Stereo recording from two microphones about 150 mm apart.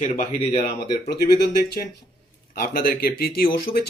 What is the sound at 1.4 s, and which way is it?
Speech, 90° left.